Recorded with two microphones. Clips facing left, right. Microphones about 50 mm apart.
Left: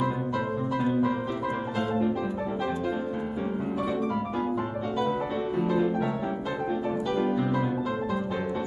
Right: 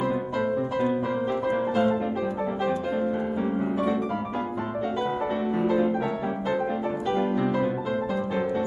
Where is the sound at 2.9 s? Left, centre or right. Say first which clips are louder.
Right 4 dB; centre.